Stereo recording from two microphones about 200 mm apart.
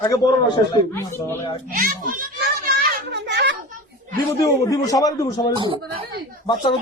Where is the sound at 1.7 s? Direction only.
45° right (ahead or behind).